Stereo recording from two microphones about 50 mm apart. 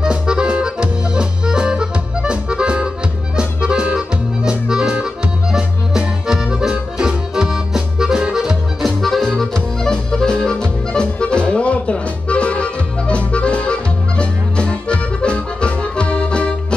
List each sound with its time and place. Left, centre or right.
0.0 s music: centre
9.0 s accordion: centre; by 16.5 s left